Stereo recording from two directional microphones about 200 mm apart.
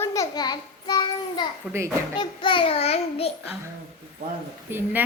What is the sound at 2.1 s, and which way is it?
A child's voice, 25° left (ahead or behind).